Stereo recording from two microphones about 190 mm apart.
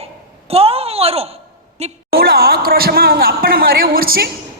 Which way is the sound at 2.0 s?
55° right (ahead or behind).